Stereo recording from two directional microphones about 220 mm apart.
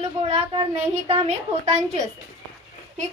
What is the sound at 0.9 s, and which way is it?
A woman's voice, 30° right (ahead or behind).